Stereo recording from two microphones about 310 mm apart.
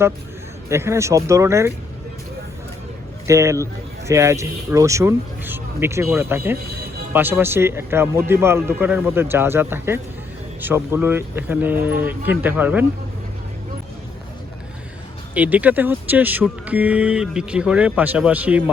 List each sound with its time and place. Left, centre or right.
0.7 s speech: centre
3.2 s speech: centre
15.4 s speech: centre